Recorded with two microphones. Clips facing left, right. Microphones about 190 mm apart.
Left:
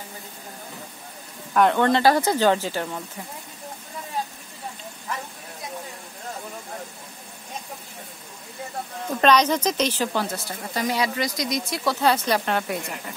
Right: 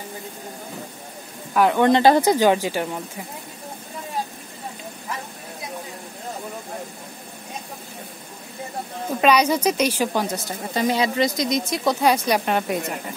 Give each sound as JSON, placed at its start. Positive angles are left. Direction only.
{"t": 1.5, "sound": "a woman's voice", "side_deg": -5}
{"t": 1.9, "sound": "speech", "side_deg": -20}
{"t": 9.2, "sound": "speech", "side_deg": -10}